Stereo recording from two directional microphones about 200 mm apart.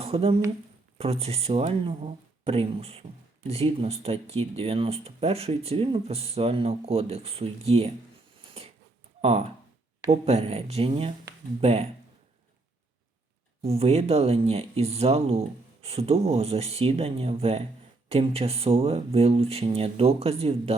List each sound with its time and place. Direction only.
0.0 s speech: 30° right (ahead or behind)
9.2 s speech: 30° right (ahead or behind)
13.6 s speech: 30° right (ahead or behind)